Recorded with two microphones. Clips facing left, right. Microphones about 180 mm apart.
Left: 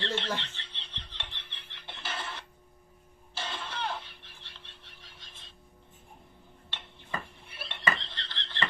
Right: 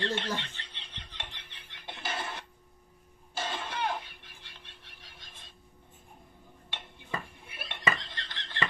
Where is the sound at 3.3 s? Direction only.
45° right (ahead or behind).